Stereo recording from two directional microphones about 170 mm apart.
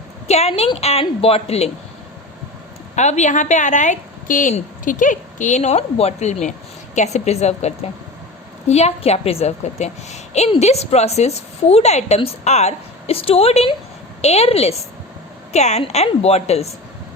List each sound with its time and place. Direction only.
0.3 s a woman's voice: 40° left (ahead or behind)
2.9 s a woman's voice: 40° left (ahead or behind)